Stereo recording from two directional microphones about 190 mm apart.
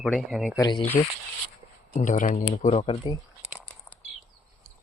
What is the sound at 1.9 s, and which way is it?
Speech, 40° left (ahead or behind).